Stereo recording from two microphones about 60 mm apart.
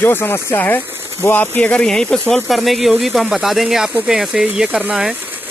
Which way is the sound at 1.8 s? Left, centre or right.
Centre.